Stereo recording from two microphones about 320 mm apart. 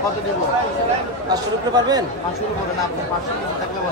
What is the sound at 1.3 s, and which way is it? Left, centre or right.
Speech, centre.